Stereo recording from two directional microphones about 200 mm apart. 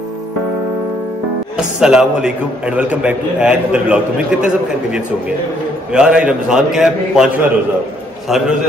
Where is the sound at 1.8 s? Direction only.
5° right (ahead or behind).